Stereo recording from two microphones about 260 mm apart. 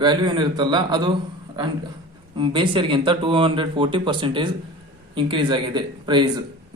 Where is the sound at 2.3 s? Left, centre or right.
Centre.